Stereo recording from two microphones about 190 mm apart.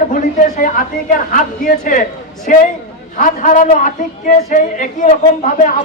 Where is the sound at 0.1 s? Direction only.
45° left (ahead or behind).